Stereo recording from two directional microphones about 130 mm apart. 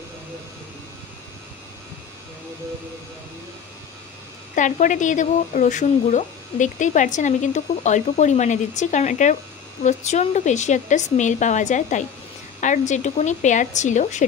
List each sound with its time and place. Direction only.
4.6 s speech: 75° left (ahead or behind)